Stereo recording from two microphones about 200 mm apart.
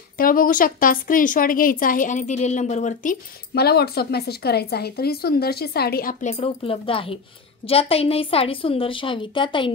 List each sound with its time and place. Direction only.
0.2 s a woman's voice: 45° left (ahead or behind)
6.3 s a woman's voice: 30° left (ahead or behind)